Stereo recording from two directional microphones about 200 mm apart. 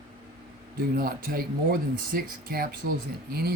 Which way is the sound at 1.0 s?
50° right (ahead or behind).